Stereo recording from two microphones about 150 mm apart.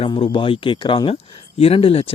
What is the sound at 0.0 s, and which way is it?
Speech, 35° left (ahead or behind).